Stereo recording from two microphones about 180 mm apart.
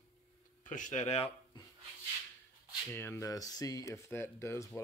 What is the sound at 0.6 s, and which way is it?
Speech, 45° left (ahead or behind).